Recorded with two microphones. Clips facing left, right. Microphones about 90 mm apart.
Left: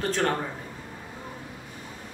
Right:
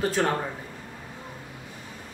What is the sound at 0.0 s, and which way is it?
Speech, 5° right (ahead or behind).